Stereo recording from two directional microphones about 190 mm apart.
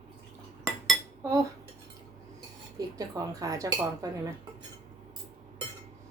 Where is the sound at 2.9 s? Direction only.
20° right (ahead or behind).